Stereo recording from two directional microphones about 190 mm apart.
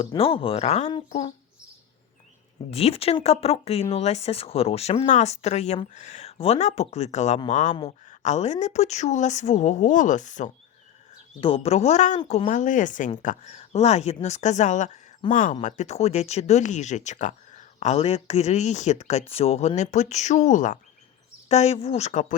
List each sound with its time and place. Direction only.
0.0 s speech: 30° left (ahead or behind)
2.6 s speech: 30° left (ahead or behind)
11.3 s speech: 30° left (ahead or behind)
12.2 s speech: 25° left (ahead or behind)
12.5 s speech: 40° left (ahead or behind)